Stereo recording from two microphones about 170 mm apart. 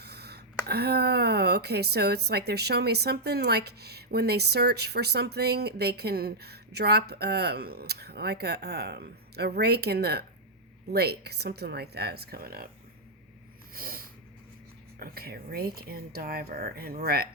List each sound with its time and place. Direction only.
0.0 s speech: 70° right (ahead or behind)
13.7 s snort: 60° right (ahead or behind)
14.9 s speech: 60° right (ahead or behind)